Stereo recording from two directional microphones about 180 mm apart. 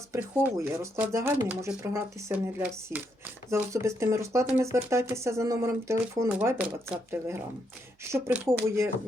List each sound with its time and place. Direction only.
0.1 s speech: 10° right (ahead or behind)